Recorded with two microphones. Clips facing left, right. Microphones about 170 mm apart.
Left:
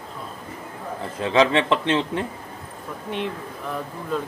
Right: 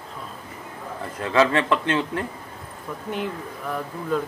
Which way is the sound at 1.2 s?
20° left (ahead or behind).